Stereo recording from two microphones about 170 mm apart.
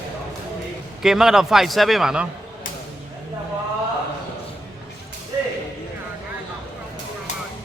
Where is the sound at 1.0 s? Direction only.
5° right (ahead or behind).